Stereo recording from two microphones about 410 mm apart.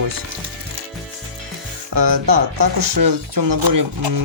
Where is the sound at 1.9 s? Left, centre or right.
Right.